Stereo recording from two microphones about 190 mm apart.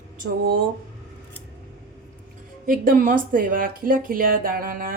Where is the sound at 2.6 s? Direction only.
50° right (ahead or behind).